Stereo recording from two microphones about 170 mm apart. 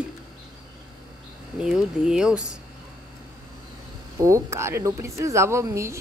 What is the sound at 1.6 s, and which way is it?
Speech, 5° right (ahead or behind).